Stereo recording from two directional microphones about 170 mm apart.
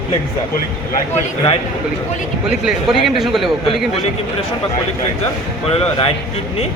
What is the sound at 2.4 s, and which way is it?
A man's voice, 5° right (ahead or behind).